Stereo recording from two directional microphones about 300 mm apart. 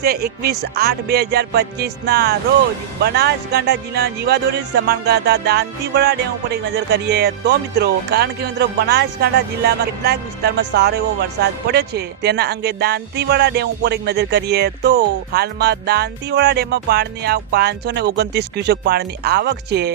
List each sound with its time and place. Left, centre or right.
0.0 s speech: right